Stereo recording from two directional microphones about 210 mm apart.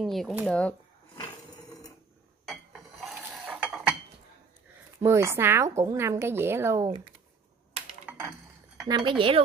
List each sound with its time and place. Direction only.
0.0 s speech: centre (ahead or behind)
3.0 s dishes: centre (ahead or behind)
5.0 s a woman's voice: 10° right (ahead or behind)
8.8 s a woman's voice: 20° right (ahead or behind)